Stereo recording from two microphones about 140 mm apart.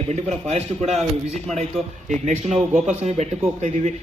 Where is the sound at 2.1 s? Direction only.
60° right (ahead or behind).